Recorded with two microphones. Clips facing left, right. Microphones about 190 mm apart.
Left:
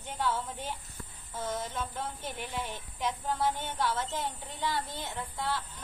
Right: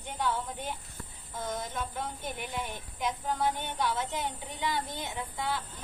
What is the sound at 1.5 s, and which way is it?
Speech, 10° right (ahead or behind).